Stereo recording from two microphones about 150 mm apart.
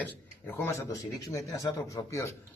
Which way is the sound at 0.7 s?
20° left (ahead or behind).